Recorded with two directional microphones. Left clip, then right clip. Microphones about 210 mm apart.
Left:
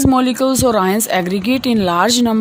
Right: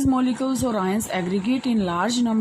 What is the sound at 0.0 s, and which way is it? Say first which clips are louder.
Speech: left 9 dB; 50° left (ahead or behind).